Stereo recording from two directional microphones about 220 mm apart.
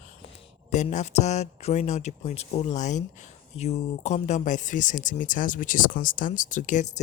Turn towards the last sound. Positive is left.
turn(degrees=35)  # may be behind; listen again after turning